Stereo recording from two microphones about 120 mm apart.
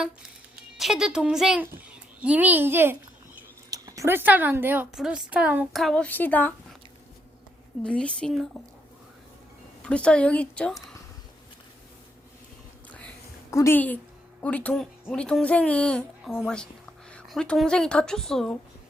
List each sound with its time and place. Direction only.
0.8 s a child's voice: 5° right (ahead or behind)
3.7 s speech: 30° right (ahead or behind)
4.9 s a child's voice: 5° right (ahead or behind)
5.7 s speech: 5° left (ahead or behind)
7.9 s speech: 10° left (ahead or behind)
9.8 s speech: 10° left (ahead or behind)
12.9 s a sound: 10° left (ahead or behind)
13.5 s a woman's voice: 25° left (ahead or behind)
13.7 s a woman's voice: 15° left (ahead or behind)